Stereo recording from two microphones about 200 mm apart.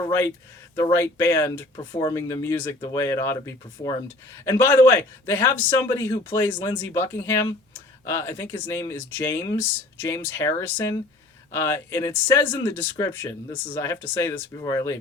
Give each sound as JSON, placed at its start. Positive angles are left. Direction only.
{"t": 0.8, "sound": "speech", "side_deg": 15}